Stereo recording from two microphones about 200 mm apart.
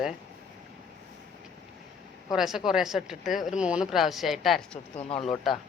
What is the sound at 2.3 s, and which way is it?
A woman's voice, centre (ahead or behind).